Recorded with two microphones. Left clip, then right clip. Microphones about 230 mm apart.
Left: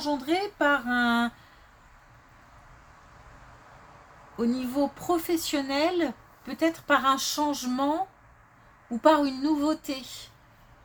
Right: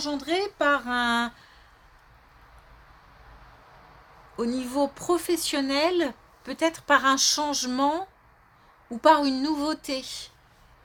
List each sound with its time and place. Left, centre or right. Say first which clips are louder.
0.0 s speech: even; right
4.4 s speech: right 1 dB; right